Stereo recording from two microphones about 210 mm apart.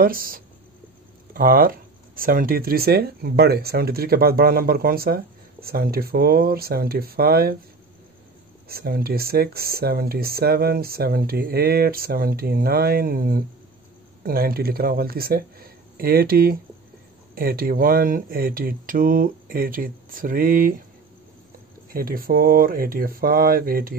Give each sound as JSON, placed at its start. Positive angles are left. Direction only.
{"t": 0.0, "sound": "speech", "side_deg": -45}
{"t": 8.6, "sound": "speech", "side_deg": -45}
{"t": 21.9, "sound": "speech", "side_deg": -45}